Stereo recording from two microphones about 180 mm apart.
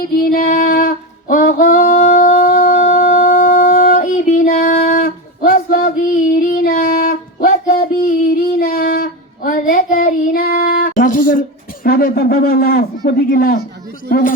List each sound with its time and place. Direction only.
0.2 s female singing: 55° left (ahead or behind)
3.2 s a sound: 50° left (ahead or behind)
6.5 s child singing: 55° left (ahead or behind)
14.1 s a man's voice: 50° left (ahead or behind)